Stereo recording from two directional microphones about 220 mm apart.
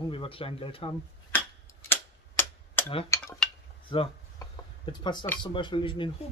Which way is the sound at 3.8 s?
20° left (ahead or behind).